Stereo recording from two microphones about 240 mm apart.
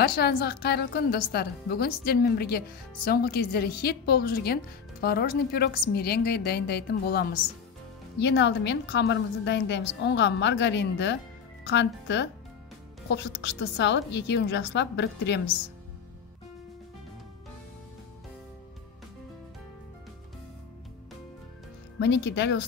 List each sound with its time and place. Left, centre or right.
0.0 s a woman's voice: left
22.0 s a woman's voice: left